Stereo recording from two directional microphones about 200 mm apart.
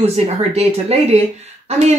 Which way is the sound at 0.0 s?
30° right (ahead or behind).